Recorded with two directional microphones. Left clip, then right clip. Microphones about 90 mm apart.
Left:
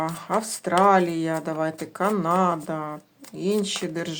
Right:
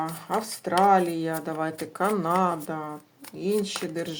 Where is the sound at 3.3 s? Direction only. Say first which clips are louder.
Left 2 dB; 40° left (ahead or behind).